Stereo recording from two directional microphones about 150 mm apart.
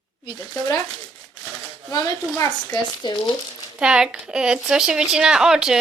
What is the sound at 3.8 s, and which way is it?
Speech, 5° right (ahead or behind).